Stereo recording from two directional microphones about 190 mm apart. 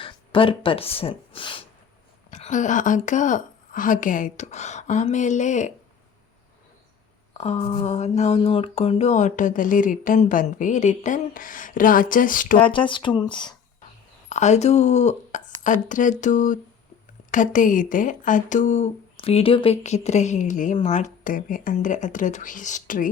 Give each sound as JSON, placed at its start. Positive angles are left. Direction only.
{"t": 0.0, "sound": "speech", "side_deg": 25}
{"t": 2.3, "sound": "speech", "side_deg": 40}
{"t": 7.3, "sound": "a sound", "side_deg": 35}
{"t": 7.9, "sound": "speech", "side_deg": 35}
{"t": 12.5, "sound": "speech", "side_deg": 25}
{"t": 14.3, "sound": "speech", "side_deg": 40}